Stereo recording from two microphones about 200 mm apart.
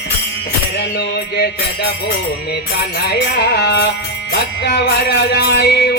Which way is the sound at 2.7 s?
50° left (ahead or behind).